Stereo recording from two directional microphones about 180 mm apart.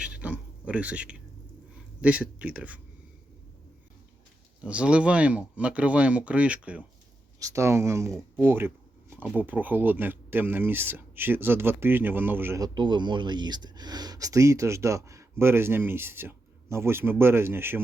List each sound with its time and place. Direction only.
0.0 s a sound: 10° right (ahead or behind)
2.0 s speech: 5° right (ahead or behind)
4.6 s speech: 5° right (ahead or behind)
7.3 s speech: 15° right (ahead or behind)